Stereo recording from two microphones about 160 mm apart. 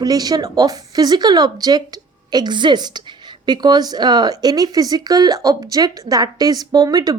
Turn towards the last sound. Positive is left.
turn(degrees=-25)  # may be behind; listen again after turning